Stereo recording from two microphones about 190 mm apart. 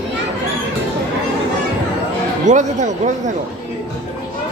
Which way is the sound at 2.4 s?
40° right (ahead or behind).